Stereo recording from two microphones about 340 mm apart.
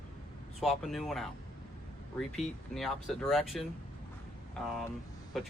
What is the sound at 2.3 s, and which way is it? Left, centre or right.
Speech, centre.